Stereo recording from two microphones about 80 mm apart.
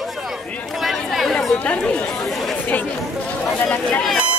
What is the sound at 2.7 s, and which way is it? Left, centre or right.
Chatter, centre.